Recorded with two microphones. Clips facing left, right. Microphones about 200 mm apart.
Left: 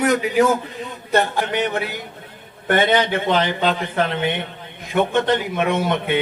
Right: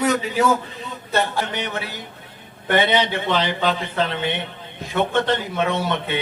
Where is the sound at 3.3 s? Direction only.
15° left (ahead or behind).